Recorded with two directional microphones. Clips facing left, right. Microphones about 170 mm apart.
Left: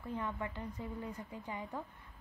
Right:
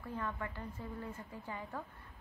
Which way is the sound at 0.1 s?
15° left (ahead or behind).